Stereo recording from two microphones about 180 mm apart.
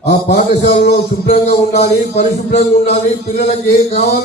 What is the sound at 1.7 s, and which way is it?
Speech, 35° left (ahead or behind).